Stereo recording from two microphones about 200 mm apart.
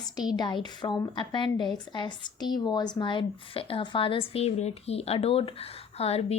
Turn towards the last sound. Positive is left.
turn(degrees=30)  # may be behind; listen again after turning